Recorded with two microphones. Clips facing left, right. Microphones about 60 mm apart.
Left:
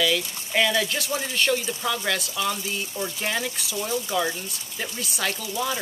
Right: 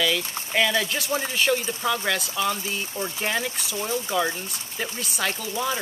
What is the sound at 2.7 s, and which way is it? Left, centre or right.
Speech, right.